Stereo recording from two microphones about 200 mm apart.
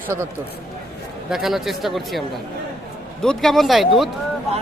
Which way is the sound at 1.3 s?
Centre (ahead or behind).